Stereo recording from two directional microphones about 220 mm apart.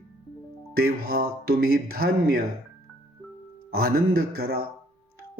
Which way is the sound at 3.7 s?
45° right (ahead or behind).